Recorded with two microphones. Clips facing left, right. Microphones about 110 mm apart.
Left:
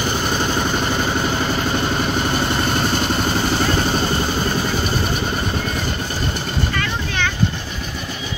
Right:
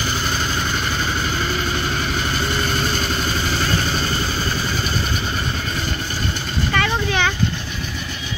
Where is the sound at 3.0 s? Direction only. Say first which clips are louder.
Left 4 dB; 45° left (ahead or behind).